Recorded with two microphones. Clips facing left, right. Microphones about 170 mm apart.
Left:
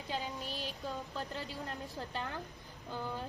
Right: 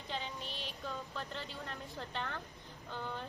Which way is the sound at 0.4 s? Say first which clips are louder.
Left 3 dB; 40° left (ahead or behind).